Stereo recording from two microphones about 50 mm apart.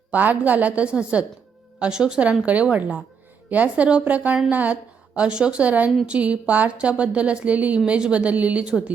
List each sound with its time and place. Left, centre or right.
0.1 s a woman's voice: right